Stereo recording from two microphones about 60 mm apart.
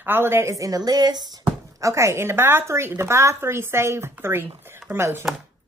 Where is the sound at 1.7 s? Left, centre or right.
Right.